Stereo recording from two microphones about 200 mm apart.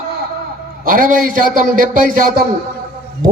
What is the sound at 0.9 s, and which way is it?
A man's voice, 40° right (ahead or behind).